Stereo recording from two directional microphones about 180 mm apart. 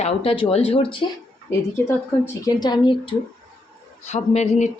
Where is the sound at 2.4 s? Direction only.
25° left (ahead or behind).